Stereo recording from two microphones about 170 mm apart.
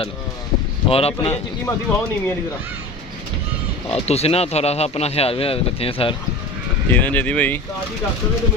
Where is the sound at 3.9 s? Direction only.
35° left (ahead or behind).